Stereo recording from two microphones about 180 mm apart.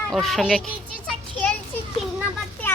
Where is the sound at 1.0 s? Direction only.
5° left (ahead or behind).